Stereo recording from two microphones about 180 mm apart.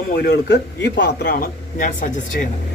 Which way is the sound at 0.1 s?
65° left (ahead or behind).